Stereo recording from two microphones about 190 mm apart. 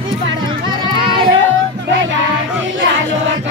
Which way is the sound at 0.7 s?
25° right (ahead or behind).